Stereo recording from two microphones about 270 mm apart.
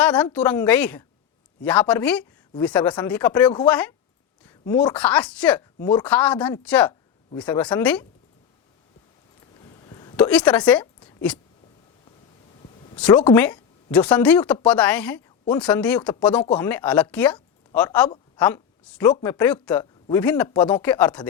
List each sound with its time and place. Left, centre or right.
0.0 s a woman's voice: centre
9.8 s a sound: centre
10.2 s speech: centre
13.0 s a woman's voice: centre